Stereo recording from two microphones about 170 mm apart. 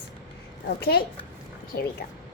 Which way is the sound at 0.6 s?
65° left (ahead or behind).